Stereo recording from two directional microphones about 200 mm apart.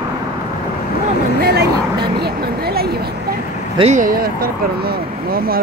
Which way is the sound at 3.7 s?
35° right (ahead or behind).